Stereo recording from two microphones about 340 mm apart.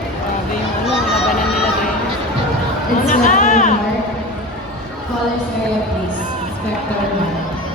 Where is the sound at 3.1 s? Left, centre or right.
Left.